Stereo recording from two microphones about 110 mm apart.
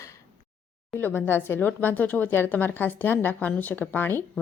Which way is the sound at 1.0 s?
15° left (ahead or behind).